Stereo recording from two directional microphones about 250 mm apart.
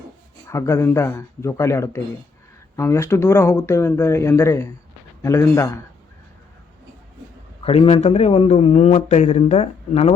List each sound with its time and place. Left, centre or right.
0.4 s speech: centre
7.6 s a man's voice: left